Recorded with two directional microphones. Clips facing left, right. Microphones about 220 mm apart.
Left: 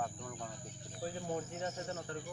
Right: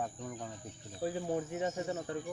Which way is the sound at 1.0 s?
10° right (ahead or behind).